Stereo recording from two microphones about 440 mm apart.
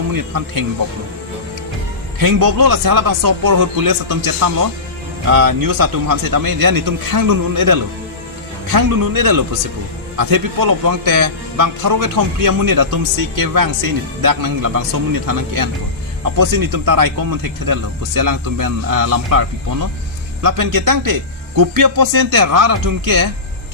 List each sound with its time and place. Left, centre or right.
0.1 s speech: right
2.2 s speech: right